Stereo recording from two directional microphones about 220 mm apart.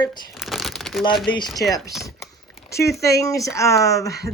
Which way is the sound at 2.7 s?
15° left (ahead or behind).